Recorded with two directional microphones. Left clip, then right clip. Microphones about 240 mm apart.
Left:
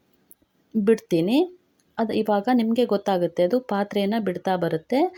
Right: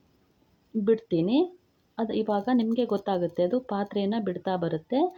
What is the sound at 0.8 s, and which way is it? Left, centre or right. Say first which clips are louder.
Speech: left 4 dB; left.